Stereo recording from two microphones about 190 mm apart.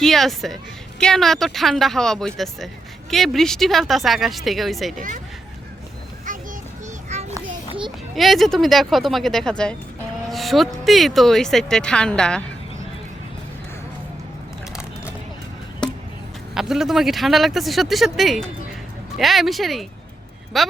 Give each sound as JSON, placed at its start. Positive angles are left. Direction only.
{"t": 0.0, "sound": "a woman's voice", "side_deg": 0}
{"t": 4.9, "sound": "speech", "side_deg": -45}
{"t": 6.3, "sound": "child singing", "side_deg": -45}
{"t": 7.1, "sound": "children playing", "side_deg": -35}
{"t": 8.1, "sound": "a woman's voice", "side_deg": 0}
{"t": 16.6, "sound": "a woman's voice", "side_deg": 0}